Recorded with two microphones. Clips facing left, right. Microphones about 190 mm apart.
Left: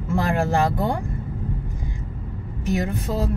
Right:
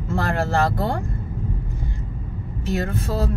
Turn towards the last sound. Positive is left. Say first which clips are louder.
# even
turn(degrees=15)  # may be behind; listen again after turning